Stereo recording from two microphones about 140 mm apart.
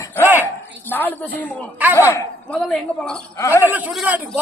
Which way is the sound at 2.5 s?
5° left (ahead or behind).